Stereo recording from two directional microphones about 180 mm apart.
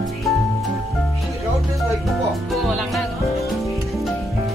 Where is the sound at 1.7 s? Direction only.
Centre (ahead or behind).